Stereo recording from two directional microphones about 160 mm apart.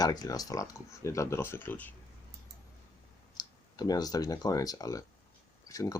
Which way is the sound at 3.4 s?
25° left (ahead or behind).